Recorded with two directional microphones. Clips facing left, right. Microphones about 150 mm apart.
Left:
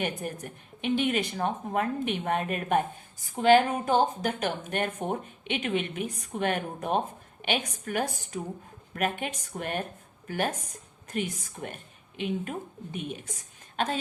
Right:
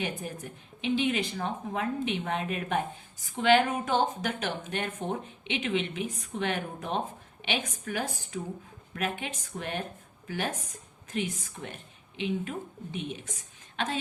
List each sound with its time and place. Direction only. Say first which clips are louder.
0.0 s a woman's voice: left 2 dB; 55° left (ahead or behind)